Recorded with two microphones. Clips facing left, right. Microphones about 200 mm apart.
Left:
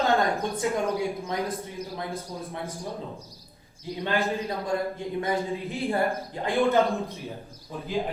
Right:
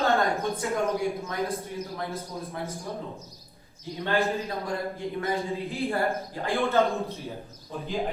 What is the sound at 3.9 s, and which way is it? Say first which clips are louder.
A woman's voice: right 1 dB; 15° left (ahead or behind).